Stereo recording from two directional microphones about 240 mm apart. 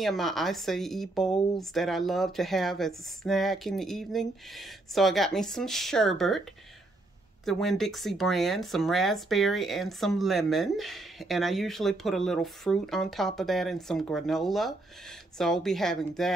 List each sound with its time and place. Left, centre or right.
0.0 s speech: centre
7.4 s speech: centre